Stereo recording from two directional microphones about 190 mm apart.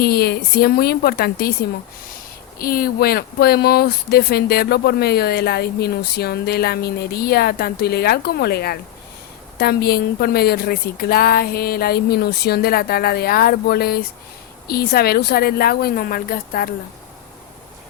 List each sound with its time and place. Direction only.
0.0 s a woman's voice: 55° left (ahead or behind)